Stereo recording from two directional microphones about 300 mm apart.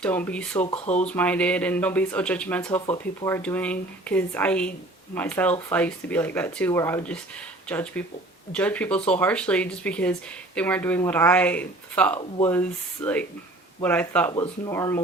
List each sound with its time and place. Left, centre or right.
0.0 s speech: centre
0.6 s speech: left
1.0 s speech: centre